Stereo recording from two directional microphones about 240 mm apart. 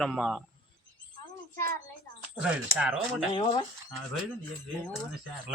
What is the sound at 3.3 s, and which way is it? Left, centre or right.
Speech, left.